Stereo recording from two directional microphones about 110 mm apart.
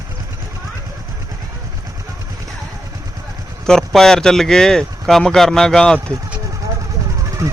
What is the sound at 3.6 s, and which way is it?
Speech, 5° left (ahead or behind).